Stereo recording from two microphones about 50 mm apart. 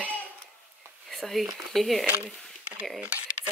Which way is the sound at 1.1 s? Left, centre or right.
Centre.